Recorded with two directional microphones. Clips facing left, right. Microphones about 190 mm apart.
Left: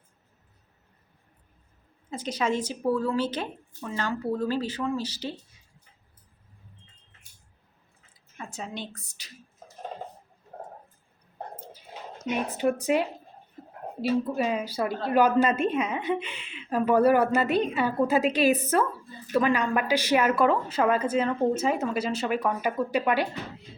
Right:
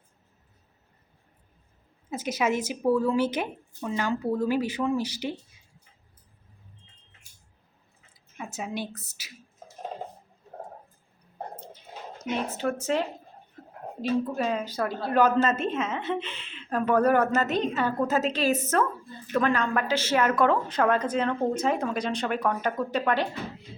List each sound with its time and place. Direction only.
2.0 s a woman's voice: 10° right (ahead or behind)
8.5 s a woman's voice: 10° right (ahead or behind)
12.5 s a woman's voice: 15° left (ahead or behind)
14.3 s a woman's voice: 10° left (ahead or behind)